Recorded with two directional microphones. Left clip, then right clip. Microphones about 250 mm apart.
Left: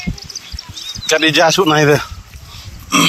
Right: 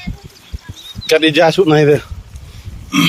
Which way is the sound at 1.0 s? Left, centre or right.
Centre.